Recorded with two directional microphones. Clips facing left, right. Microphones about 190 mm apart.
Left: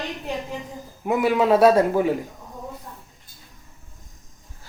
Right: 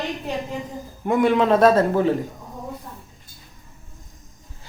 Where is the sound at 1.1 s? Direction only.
5° left (ahead or behind).